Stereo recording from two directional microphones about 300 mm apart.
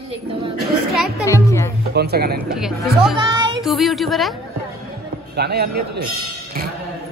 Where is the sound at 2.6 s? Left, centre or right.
Centre.